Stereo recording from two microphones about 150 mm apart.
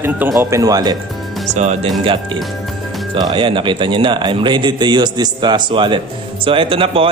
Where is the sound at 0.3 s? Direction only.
20° right (ahead or behind).